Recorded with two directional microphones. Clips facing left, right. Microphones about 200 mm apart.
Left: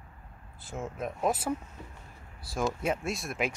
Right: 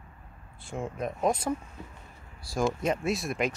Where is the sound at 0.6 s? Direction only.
Centre (ahead or behind).